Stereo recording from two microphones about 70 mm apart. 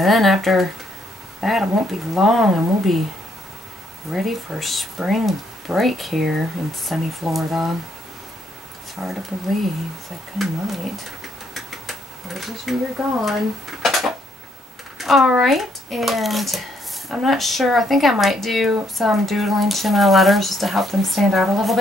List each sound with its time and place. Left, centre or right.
0.0 s speech: centre
4.1 s speech: centre
8.9 s speech: centre
10.4 s a sound: centre
13.0 s speech: centre
13.8 s dishes: centre
15.0 s a sound: centre
15.3 s speech: centre